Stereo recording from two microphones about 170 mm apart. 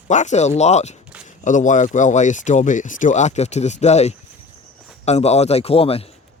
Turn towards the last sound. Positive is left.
turn(degrees=35)  # may be behind; listen again after turning